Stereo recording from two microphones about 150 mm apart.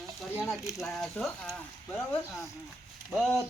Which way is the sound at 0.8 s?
Centre (ahead or behind).